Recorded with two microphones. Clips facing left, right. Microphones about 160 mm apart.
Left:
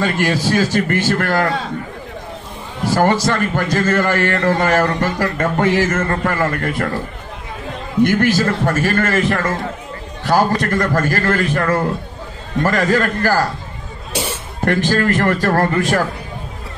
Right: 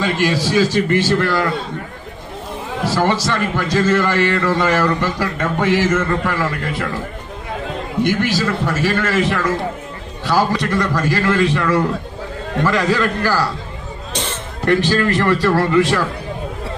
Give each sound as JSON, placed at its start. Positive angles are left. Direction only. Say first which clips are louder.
{"t": 0.0, "sound": "a man's voice", "louder": "even", "side_deg": 50}
{"t": 2.9, "sound": "a man's voice", "louder": "left 3 dB", "side_deg": 50}
{"t": 8.0, "sound": "a man's voice", "louder": "left 4 dB", "side_deg": 50}
{"t": 14.1, "sound": "cough", "louder": "left 3 dB", "side_deg": 10}
{"t": 14.6, "sound": "a man's voice", "louder": "right 1 dB", "side_deg": 50}